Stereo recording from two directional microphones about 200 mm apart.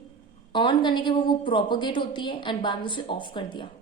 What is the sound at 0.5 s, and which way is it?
A woman's voice, 25° left (ahead or behind).